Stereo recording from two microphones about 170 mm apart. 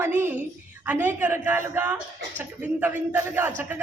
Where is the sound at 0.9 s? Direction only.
10° right (ahead or behind).